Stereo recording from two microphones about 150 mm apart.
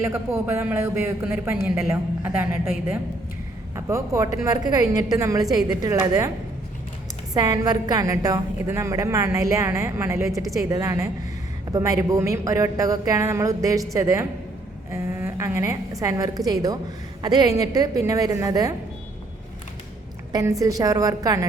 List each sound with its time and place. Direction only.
0.0 s a man's voice: 15° right (ahead or behind)
7.3 s a woman's voice: 25° right (ahead or behind)
20.3 s a woman's voice: 20° right (ahead or behind)